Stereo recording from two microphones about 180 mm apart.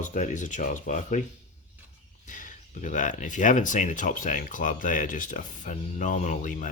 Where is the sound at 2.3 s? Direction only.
45° left (ahead or behind).